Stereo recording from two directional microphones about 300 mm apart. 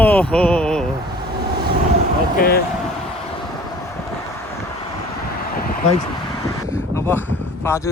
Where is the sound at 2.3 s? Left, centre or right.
Left.